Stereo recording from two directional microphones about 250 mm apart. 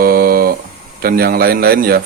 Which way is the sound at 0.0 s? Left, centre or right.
Right.